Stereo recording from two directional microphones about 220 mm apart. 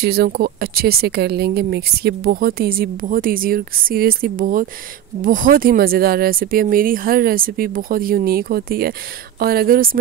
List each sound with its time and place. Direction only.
0.0 s speech: 45° right (ahead or behind)